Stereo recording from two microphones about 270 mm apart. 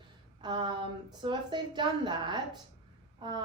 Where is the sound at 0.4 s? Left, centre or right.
Centre.